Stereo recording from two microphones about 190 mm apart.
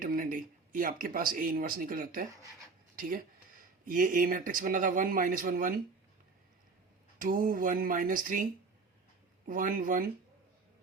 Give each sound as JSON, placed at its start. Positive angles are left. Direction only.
{"t": 0.0, "sound": "speech", "side_deg": -45}
{"t": 2.3, "sound": "speech", "side_deg": -15}
{"t": 2.9, "sound": "a sound", "side_deg": -50}
{"t": 3.8, "sound": "speech", "side_deg": -45}
{"t": 7.2, "sound": "speech", "side_deg": -45}
{"t": 9.5, "sound": "speech", "side_deg": -45}